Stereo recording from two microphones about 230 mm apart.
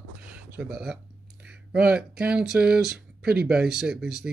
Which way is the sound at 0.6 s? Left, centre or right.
Centre.